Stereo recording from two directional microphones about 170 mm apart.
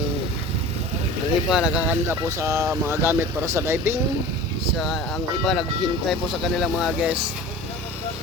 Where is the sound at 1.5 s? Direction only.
5° right (ahead or behind).